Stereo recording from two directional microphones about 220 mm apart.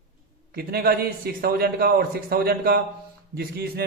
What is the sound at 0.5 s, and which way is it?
A man's voice, 45° right (ahead or behind).